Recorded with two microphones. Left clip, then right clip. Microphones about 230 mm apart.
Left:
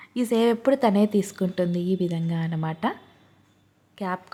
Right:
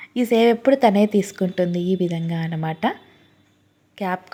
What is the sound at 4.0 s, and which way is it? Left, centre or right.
Speech, centre.